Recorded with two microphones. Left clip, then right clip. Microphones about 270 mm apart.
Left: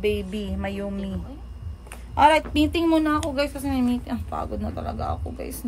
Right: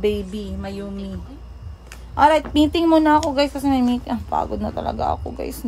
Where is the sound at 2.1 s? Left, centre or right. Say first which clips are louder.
Right 2 dB; centre.